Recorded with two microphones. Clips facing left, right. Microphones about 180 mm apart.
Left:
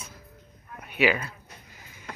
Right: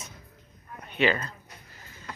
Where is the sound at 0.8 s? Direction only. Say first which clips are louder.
Left 1 dB; 10° left (ahead or behind).